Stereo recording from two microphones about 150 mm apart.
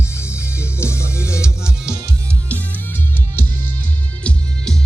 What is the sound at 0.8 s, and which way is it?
Music, 20° left (ahead or behind).